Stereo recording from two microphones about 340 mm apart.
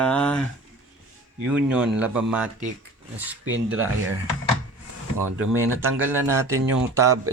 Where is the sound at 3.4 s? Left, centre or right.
Right.